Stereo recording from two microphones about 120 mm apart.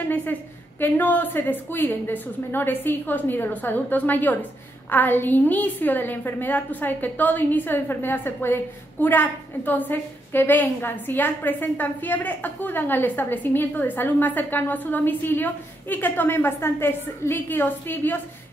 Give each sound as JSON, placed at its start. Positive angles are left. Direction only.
{"t": 0.1, "sound": "a woman's voice", "side_deg": 15}